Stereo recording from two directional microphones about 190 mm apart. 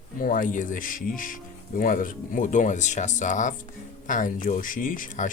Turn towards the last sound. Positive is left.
turn(degrees=45)  # may be behind; listen again after turning